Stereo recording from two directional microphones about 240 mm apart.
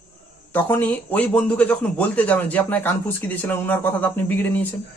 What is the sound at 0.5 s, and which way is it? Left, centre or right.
Speech, centre.